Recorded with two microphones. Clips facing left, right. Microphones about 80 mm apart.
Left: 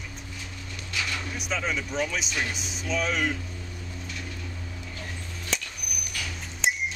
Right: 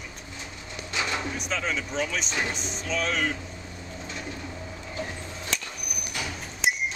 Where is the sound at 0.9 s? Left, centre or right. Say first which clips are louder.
Right 3 dB; right.